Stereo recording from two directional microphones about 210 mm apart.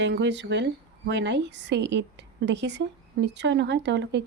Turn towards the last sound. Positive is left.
turn(degrees=-55)  # may be behind; listen again after turning